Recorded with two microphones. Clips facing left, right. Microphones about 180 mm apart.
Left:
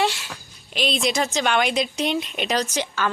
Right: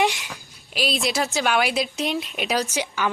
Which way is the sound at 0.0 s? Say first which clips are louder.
Right 1 dB; 15° right (ahead or behind).